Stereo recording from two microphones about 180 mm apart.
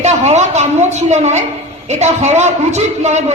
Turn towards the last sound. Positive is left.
turn(degrees=-40)  # may be behind; listen again after turning